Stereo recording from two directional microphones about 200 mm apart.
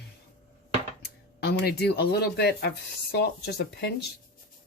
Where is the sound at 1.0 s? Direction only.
55° left (ahead or behind).